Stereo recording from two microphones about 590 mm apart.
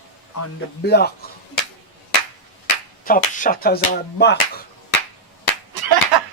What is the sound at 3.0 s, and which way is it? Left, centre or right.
A man's voice, centre.